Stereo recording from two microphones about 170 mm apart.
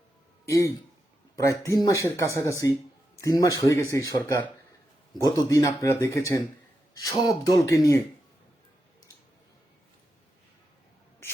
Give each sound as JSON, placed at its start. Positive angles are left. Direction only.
{"t": 0.4, "sound": "a man's voice", "side_deg": 15}